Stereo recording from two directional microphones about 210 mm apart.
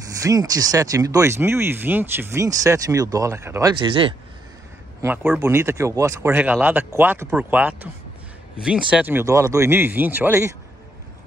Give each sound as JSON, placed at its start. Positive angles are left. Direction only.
{"t": 0.2, "sound": "speech", "side_deg": -15}
{"t": 5.0, "sound": "speech", "side_deg": -10}
{"t": 8.9, "sound": "speech", "side_deg": -10}